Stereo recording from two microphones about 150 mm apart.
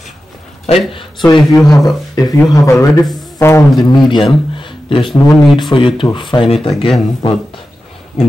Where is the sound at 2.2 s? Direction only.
25° left (ahead or behind).